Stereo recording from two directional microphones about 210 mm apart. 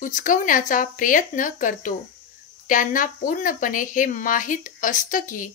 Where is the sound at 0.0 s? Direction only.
40° left (ahead or behind).